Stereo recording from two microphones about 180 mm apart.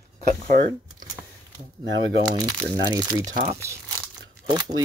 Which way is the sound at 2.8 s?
20° right (ahead or behind).